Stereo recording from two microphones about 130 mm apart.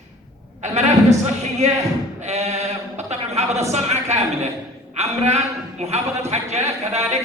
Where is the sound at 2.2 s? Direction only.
60° right (ahead or behind).